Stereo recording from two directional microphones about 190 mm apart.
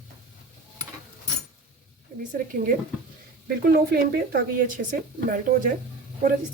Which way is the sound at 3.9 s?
55° right (ahead or behind).